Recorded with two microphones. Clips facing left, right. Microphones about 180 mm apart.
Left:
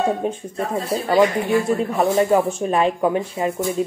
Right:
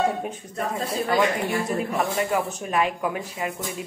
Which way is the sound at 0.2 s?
30° left (ahead or behind).